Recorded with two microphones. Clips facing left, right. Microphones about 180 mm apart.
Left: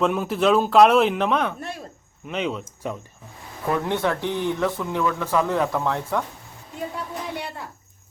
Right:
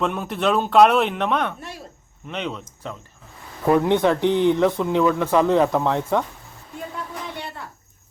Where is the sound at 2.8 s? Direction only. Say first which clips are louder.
Left 4 dB; 15° left (ahead or behind).